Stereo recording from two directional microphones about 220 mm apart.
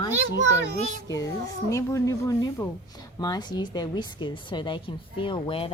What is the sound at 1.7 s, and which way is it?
A woman's voice, 15° left (ahead or behind).